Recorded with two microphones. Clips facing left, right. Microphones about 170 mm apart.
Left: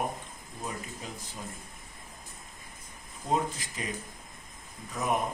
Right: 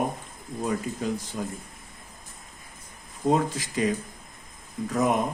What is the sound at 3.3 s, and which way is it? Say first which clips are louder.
Speech: right 2 dB; 90° right.